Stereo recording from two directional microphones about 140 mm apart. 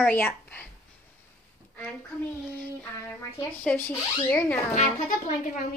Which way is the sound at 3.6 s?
15° left (ahead or behind).